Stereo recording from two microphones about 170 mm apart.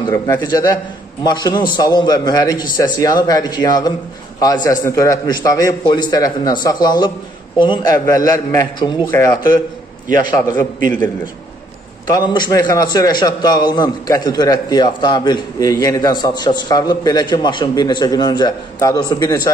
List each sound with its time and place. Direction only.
0.0 s a man's voice: 20° left (ahead or behind)
12.1 s a man's voice: 25° left (ahead or behind)